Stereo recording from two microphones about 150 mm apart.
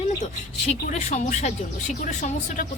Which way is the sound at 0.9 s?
50° left (ahead or behind).